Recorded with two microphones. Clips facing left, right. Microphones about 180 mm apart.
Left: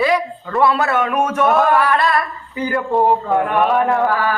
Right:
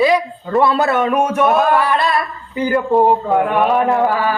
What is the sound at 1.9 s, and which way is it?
A man's voice, 25° right (ahead or behind).